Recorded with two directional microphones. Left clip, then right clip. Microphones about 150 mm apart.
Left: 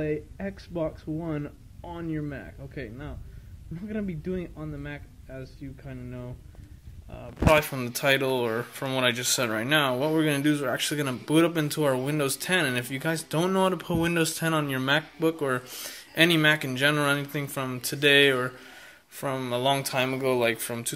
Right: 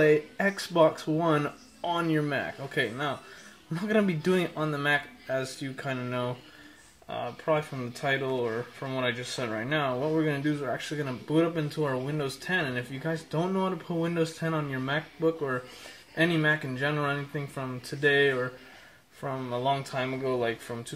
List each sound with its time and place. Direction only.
0.0 s speech: 15° right (ahead or behind)
7.5 s speech: 15° left (ahead or behind)
20.1 s speech: 25° left (ahead or behind)